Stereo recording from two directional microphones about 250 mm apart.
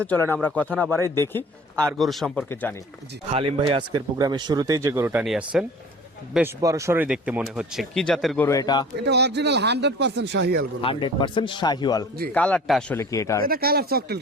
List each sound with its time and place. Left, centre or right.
0.1 s speech: centre
3.3 s speech: right; by 8.4 s centre
8.4 s speech: centre
9.0 s speech: right
10.8 s a man's voice: centre
12.3 s speech: centre
13.0 s speech: centre
13.4 s speech: right